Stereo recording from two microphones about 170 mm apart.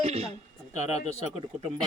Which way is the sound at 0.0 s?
40° right (ahead or behind).